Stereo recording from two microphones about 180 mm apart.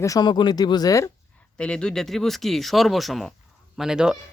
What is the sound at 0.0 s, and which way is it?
Speech, 20° left (ahead or behind).